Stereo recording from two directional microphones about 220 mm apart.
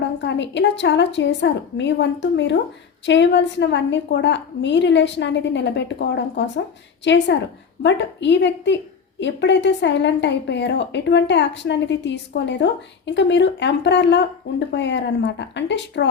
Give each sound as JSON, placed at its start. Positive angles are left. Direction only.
{"t": 0.0, "sound": "a woman's voice", "side_deg": 55}